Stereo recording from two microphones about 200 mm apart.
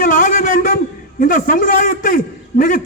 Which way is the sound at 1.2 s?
45° left (ahead or behind).